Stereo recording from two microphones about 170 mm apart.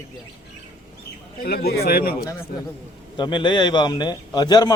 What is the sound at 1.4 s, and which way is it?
Speech, 65° left (ahead or behind).